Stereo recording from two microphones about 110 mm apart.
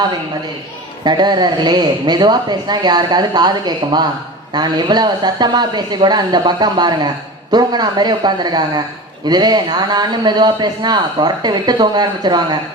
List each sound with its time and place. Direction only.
1.0 s a man's voice: 40° right (ahead or behind)